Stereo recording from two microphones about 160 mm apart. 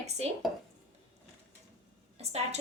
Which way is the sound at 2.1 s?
40° right (ahead or behind).